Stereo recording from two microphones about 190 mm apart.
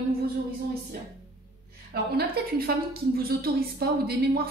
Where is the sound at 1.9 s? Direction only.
55° right (ahead or behind).